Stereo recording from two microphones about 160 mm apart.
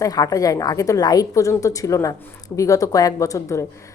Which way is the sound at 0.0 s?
25° left (ahead or behind).